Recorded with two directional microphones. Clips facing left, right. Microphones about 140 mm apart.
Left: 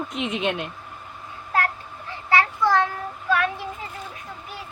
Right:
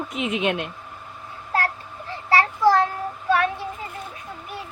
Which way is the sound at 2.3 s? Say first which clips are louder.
Right 2 dB; 35° right (ahead or behind).